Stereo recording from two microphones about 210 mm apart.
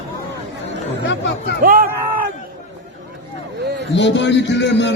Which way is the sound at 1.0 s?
60° left (ahead or behind).